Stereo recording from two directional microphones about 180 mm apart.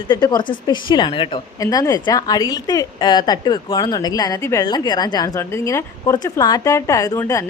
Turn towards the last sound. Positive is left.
turn(degrees=15)  # may be behind; listen again after turning